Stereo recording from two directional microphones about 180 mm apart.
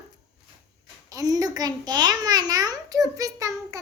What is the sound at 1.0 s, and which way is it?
A child's voice, 20° right (ahead or behind).